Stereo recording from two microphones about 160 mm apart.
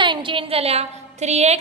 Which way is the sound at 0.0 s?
30° right (ahead or behind).